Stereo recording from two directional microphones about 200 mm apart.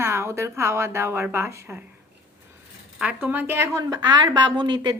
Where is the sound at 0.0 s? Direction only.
15° right (ahead or behind).